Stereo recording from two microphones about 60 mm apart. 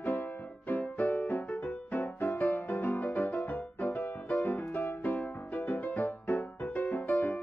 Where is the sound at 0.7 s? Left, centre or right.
Left.